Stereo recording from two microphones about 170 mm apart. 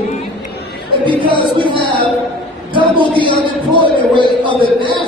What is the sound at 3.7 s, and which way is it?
Music, 30° right (ahead or behind).